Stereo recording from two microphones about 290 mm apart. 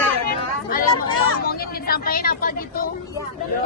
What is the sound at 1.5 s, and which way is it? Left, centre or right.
Speech, left.